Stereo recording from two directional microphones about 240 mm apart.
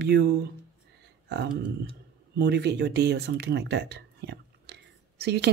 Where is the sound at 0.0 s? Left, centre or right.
Right.